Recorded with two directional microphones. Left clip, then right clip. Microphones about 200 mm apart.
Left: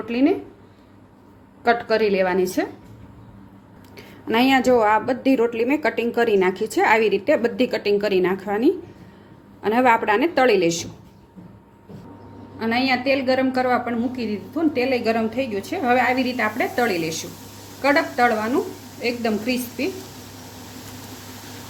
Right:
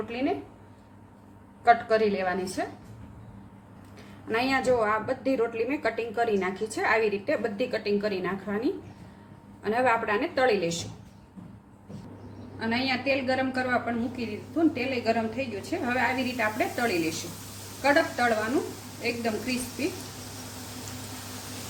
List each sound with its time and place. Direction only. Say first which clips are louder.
0.0 s a woman's voice: left 9 dB; 45° left (ahead or behind)
1.6 s a woman's voice: left 3 dB; 45° left (ahead or behind)
3.9 s a woman's voice: left 8 dB; 50° left (ahead or behind)
12.5 s a woman's voice: left 7 dB; 50° left (ahead or behind)